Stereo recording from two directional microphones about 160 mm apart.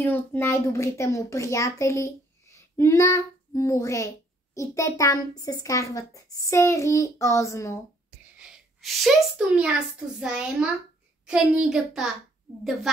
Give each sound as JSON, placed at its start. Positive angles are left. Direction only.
{"t": 0.0, "sound": "a child's voice", "side_deg": 10}
{"t": 6.4, "sound": "child singing", "side_deg": 20}
{"t": 8.4, "sound": "a child's voice", "side_deg": -5}